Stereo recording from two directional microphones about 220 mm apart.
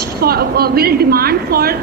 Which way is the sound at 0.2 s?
45° right (ahead or behind).